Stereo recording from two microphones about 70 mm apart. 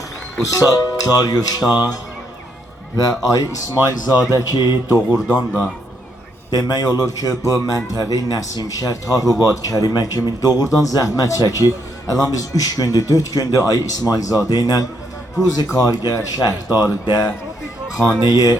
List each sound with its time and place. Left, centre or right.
0.4 s a man's voice: left
3.0 s a man's voice: left
4.4 s a man's voice: left
5.3 s speech: right
6.5 s a man's voice: left
15.6 s a man's voice: left
16.7 s a man's voice: left